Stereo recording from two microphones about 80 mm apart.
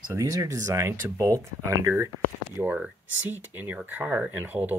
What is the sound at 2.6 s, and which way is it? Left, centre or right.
Speech, right.